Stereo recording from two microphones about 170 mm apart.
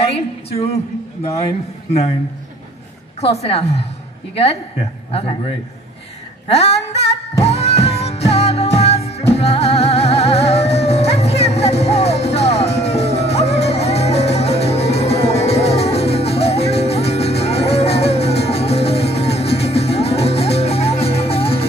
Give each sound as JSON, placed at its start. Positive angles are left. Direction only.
{"t": 0.0, "sound": "a woman's voice", "side_deg": 35}
{"t": 3.2, "sound": "a woman's voice", "side_deg": 35}
{"t": 6.4, "sound": "a sound", "side_deg": 35}
{"t": 7.4, "sound": "music", "side_deg": 40}